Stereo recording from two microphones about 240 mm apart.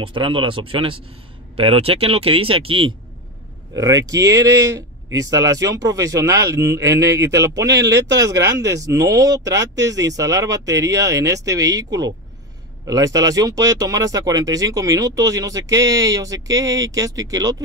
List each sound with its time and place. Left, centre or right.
0.0 s speech: right